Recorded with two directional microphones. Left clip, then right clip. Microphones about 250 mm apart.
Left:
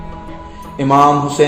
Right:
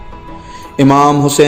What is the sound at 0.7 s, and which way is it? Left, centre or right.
Speech, right.